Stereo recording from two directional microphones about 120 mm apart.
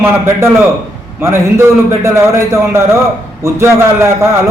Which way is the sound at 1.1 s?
20° right (ahead or behind).